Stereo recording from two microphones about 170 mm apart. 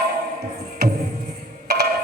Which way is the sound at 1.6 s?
70° right (ahead or behind).